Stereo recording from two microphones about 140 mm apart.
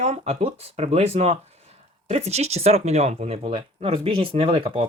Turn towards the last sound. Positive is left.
turn(degrees=-40)  # may be behind; listen again after turning